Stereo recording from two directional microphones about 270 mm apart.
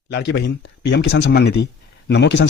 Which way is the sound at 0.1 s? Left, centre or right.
Left.